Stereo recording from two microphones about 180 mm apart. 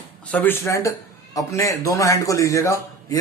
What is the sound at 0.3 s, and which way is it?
A man's voice, 10° left (ahead or behind).